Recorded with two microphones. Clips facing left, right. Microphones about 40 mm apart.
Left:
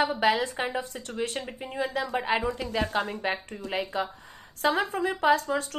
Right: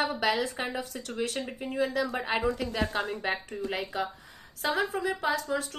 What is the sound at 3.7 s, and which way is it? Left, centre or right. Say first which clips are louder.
Speech: left 4 dB; left.